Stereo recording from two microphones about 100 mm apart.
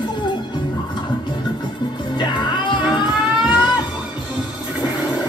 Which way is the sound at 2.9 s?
5° right (ahead or behind).